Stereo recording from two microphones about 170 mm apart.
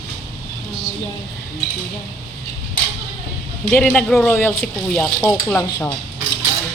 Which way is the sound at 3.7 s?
5° left (ahead or behind).